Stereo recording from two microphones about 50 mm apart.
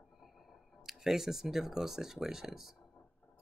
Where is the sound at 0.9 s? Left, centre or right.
Centre.